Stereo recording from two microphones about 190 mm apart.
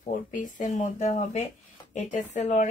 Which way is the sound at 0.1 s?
45° left (ahead or behind).